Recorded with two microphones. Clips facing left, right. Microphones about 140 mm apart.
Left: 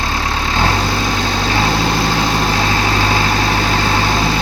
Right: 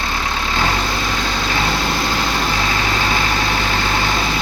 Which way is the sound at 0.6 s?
30° left (ahead or behind).